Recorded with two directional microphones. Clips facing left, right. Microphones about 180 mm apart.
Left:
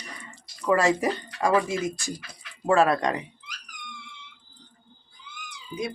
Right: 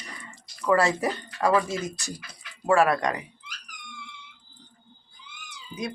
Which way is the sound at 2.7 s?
25° left (ahead or behind).